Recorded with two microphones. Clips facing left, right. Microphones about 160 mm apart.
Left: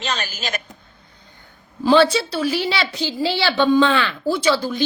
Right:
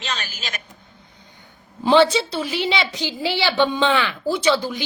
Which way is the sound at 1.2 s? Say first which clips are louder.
Right 1 dB; 15° right (ahead or behind).